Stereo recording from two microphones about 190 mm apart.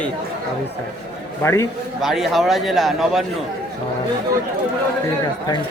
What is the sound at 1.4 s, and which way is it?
Speech, 15° left (ahead or behind).